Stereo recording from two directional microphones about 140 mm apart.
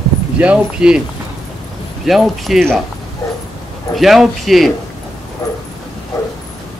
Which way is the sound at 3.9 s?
Centre (ahead or behind).